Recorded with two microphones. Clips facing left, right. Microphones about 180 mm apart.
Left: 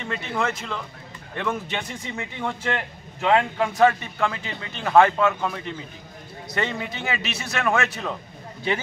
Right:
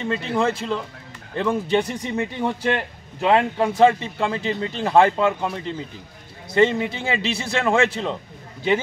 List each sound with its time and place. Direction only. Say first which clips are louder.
0.0 s a man's voice: right 5 dB; 30° right (ahead or behind)